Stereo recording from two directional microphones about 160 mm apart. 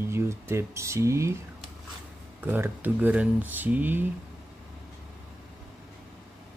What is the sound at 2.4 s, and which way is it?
Speech, 10° right (ahead or behind).